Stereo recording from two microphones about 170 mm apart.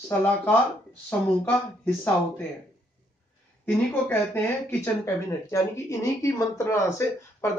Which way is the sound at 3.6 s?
10° left (ahead or behind).